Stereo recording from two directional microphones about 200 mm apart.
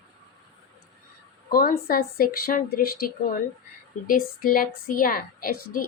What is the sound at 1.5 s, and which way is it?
A woman's voice, 45° left (ahead or behind).